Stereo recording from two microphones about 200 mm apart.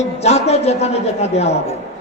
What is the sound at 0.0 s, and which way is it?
A man's voice, 30° left (ahead or behind).